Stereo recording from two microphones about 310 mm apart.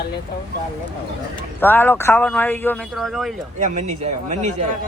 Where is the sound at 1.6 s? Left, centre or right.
Centre.